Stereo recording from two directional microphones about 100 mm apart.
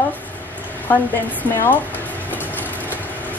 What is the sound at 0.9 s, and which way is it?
Speech, 20° left (ahead or behind).